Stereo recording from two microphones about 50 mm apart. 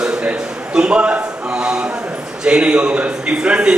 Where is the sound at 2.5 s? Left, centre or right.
Centre.